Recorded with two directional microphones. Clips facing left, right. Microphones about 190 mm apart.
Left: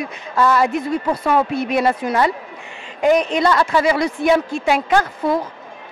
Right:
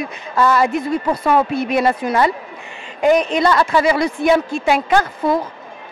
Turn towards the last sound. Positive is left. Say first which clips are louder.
# right 1 dB
turn(degrees=-10)  # may be behind; listen again after turning